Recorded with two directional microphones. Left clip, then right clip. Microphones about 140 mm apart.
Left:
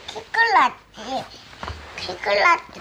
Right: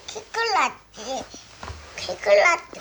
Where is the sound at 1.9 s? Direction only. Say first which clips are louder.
Right 3 dB; 20° right (ahead or behind).